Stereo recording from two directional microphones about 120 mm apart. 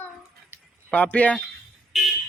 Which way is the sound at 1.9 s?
Centre (ahead or behind).